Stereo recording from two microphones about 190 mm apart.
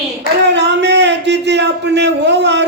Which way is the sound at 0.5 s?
65° right (ahead or behind).